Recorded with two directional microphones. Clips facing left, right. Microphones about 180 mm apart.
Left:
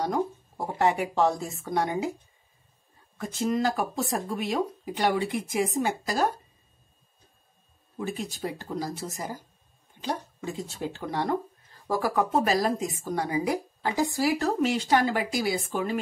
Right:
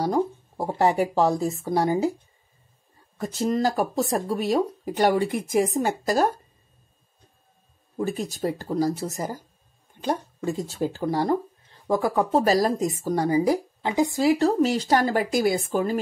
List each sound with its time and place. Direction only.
0.0 s a sound: 35° right (ahead or behind)
1.4 s speech: 35° right (ahead or behind)
3.2 s speech: 40° right (ahead or behind)
8.0 s speech: 40° right (ahead or behind)
11.7 s speech: 25° right (ahead or behind); by 16.0 s 40° right (ahead or behind)